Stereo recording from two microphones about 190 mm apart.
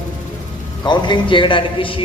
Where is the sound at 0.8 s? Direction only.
25° left (ahead or behind).